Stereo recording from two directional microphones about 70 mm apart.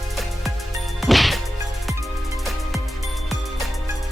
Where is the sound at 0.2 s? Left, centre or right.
Centre.